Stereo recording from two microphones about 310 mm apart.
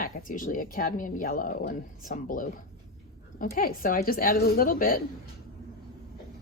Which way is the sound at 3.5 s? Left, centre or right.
Left.